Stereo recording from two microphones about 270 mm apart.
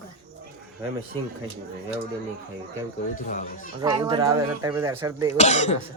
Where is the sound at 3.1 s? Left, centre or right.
Left.